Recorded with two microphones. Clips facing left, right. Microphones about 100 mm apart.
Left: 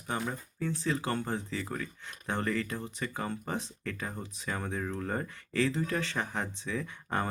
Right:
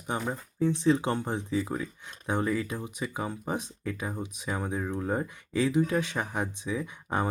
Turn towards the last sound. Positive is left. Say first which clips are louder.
# right 3 dB
turn(degrees=-15)  # may be behind; listen again after turning